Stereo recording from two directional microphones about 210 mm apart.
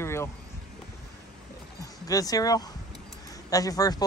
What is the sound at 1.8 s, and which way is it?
Speech, 15° left (ahead or behind).